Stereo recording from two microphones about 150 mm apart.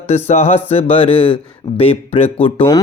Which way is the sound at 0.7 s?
40° left (ahead or behind).